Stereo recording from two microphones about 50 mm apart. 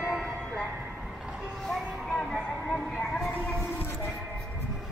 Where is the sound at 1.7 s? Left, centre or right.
Centre.